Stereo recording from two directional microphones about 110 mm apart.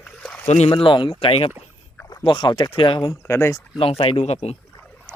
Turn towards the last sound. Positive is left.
turn(degrees=80)